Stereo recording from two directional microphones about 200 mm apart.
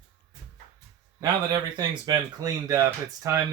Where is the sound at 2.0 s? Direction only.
20° right (ahead or behind).